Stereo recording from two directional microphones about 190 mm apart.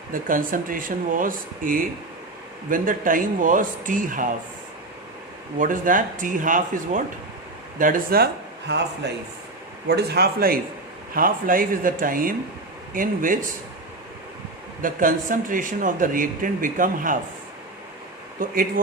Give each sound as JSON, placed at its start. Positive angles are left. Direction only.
{"t": 0.1, "sound": "a man's voice", "side_deg": -45}
{"t": 5.5, "sound": "a man's voice", "side_deg": -45}
{"t": 14.8, "sound": "a man's voice", "side_deg": -45}
{"t": 18.4, "sound": "a man's voice", "side_deg": -45}